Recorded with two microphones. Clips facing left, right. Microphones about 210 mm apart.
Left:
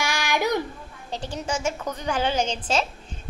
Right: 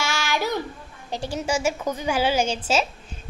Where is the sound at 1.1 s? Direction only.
10° right (ahead or behind).